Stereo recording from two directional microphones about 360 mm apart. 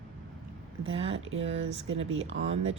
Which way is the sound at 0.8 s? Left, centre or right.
Centre.